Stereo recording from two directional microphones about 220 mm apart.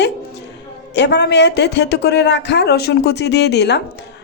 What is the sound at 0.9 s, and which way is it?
Speech, 50° left (ahead or behind).